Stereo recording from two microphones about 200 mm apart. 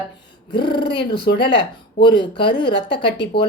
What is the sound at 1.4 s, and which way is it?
Speech, 25° left (ahead or behind).